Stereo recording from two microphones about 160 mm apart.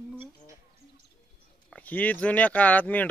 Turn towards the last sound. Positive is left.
turn(degrees=10)  # may be behind; listen again after turning